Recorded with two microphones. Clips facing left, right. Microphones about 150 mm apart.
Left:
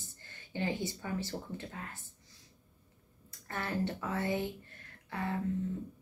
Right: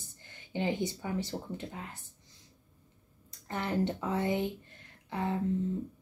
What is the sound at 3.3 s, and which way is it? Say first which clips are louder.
Speech: right 4 dB; 20° right (ahead or behind).